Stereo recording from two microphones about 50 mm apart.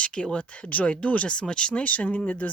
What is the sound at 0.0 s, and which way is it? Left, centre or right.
Speech, left.